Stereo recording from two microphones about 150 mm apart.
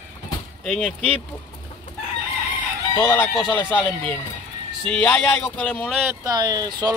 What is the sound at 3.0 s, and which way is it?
Speech, 20° left (ahead or behind).